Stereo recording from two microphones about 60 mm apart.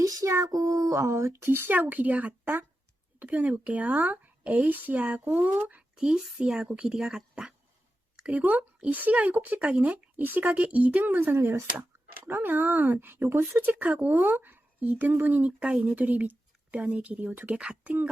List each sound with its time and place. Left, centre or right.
0.0 s female singing: right
0.9 s a woman's voice: right; by 7.5 s centre
8.3 s a woman's voice: right
11.0 s speech: right
11.5 s a sound: right
12.3 s speech: right
13.7 s a woman's voice: right
17.5 s speech: centre